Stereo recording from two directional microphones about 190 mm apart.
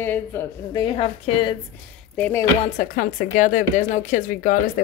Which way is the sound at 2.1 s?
5° left (ahead or behind).